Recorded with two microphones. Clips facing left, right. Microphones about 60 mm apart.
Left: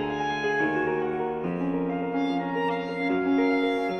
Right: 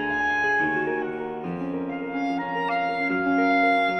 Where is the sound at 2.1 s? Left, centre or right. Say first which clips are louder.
Right 2 dB; right.